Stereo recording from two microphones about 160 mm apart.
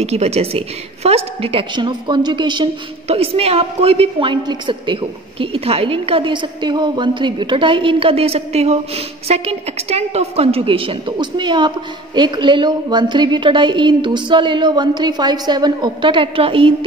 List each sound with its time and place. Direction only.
0.0 s a woman's voice: 40° right (ahead or behind)